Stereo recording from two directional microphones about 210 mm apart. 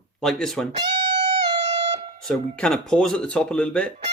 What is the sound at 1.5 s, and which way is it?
Music, 30° right (ahead or behind).